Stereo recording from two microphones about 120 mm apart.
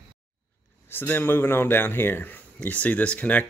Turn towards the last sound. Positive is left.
turn(degrees=10)  # may be behind; listen again after turning